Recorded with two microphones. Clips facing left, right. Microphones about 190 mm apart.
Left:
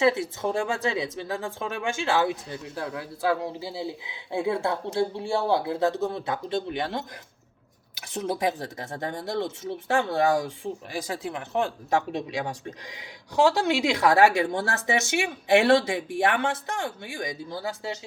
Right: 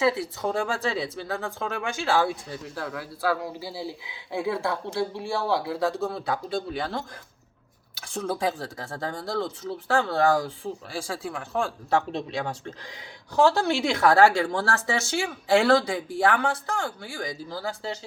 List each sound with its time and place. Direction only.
0.0 s speech: 25° left (ahead or behind)